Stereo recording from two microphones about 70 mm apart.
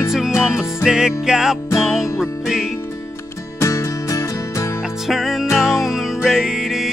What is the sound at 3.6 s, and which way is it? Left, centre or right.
Music, left.